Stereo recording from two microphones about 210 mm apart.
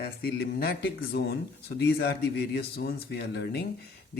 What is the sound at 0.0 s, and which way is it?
Speech, 50° left (ahead or behind).